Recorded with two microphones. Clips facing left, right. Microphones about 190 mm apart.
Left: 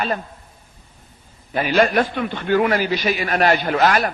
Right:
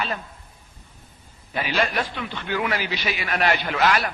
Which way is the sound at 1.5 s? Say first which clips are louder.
Left 8 dB; 45° left (ahead or behind).